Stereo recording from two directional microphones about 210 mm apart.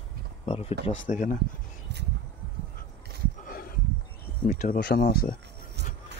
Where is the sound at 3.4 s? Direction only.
45° left (ahead or behind).